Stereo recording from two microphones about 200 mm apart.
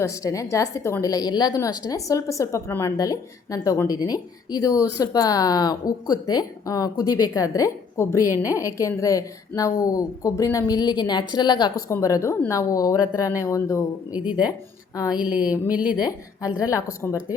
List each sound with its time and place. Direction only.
0.0 s speech: 15° left (ahead or behind)
14.1 s a woman's voice: 5° right (ahead or behind)
16.6 s speech: 15° left (ahead or behind)